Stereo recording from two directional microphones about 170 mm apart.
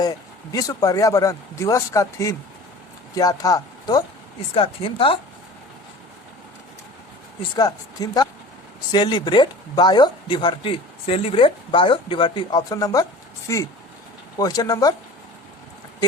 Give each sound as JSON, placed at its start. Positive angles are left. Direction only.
{"t": 0.0, "sound": "speech", "side_deg": 20}
{"t": 4.5, "sound": "speech", "side_deg": 30}
{"t": 7.5, "sound": "speech", "side_deg": 20}